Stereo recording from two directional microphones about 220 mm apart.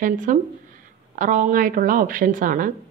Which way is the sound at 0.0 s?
35° right (ahead or behind).